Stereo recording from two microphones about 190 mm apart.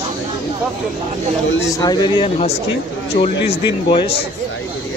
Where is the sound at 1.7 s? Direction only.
20° left (ahead or behind).